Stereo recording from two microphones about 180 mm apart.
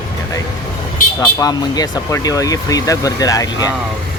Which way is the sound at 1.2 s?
20° left (ahead or behind).